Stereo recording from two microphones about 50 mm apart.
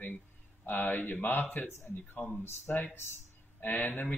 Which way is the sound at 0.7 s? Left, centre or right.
Left.